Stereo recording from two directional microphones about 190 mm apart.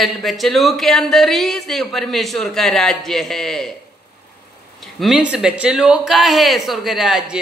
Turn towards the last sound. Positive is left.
turn(degrees=-5)  # may be behind; listen again after turning